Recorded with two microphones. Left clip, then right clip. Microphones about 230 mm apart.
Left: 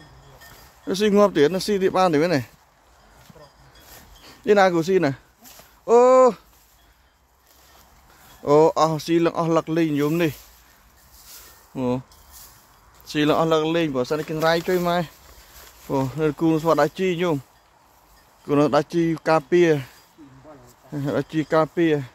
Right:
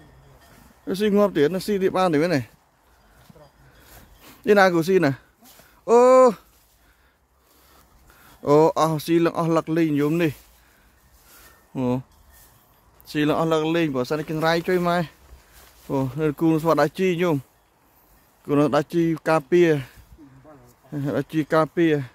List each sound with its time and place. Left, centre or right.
0.8 s speech: centre
4.2 s speech: right
8.4 s speech: right
11.7 s speech: right
13.0 s speech: centre; by 17.4 s right
18.4 s speech: centre